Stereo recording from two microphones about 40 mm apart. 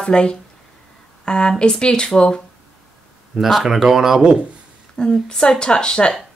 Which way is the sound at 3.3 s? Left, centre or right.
Centre.